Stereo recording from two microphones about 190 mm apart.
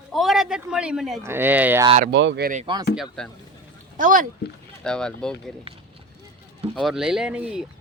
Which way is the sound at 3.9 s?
45° right (ahead or behind).